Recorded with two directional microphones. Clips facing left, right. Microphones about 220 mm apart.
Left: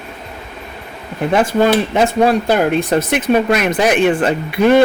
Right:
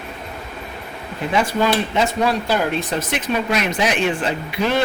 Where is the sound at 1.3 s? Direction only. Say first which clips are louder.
Left 6 dB; 50° left (ahead or behind).